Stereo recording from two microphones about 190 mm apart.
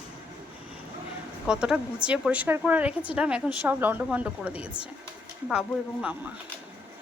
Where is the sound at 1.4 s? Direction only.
5° right (ahead or behind).